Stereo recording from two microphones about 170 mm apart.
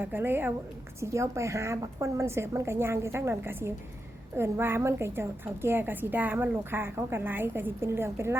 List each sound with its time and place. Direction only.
0.0 s a woman's voice: 10° right (ahead or behind)